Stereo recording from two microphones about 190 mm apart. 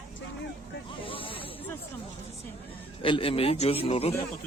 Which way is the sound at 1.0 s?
30° left (ahead or behind).